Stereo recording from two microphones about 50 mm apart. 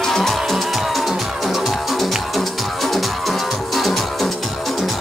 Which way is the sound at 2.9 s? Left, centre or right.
Centre.